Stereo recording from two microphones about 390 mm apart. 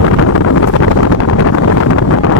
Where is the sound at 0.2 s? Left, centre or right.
Left.